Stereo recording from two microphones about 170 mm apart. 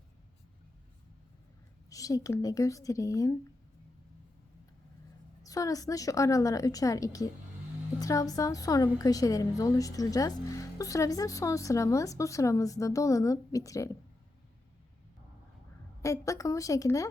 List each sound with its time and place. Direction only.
1.9 s a woman's voice: 20° left (ahead or behind)
5.4 s a woman's voice: 20° left (ahead or behind)
16.0 s a woman's voice: 20° left (ahead or behind)